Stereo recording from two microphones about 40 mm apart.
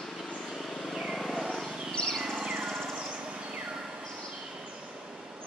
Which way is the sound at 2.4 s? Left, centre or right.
Centre.